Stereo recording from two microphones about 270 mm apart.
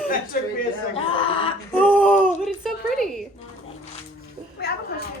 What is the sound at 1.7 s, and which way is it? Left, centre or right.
Speech, centre.